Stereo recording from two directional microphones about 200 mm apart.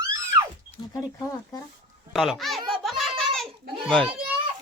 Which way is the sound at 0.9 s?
20° left (ahead or behind).